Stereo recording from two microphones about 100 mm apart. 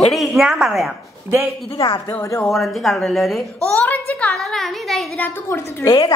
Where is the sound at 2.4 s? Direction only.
Centre (ahead or behind).